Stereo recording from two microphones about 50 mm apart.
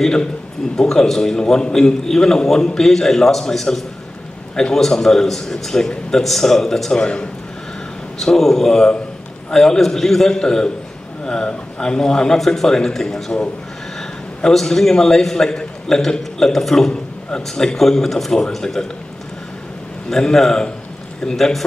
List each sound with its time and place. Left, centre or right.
0.0 s a man's voice: centre
8.2 s a man's voice: centre
20.1 s a man's voice: centre